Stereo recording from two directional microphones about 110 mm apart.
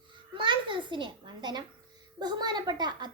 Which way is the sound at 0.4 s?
45° right (ahead or behind).